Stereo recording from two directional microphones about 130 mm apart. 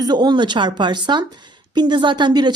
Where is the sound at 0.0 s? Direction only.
35° right (ahead or behind).